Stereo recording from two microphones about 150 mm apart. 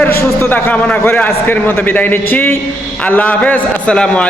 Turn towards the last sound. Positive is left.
turn(degrees=5)  # may be behind; listen again after turning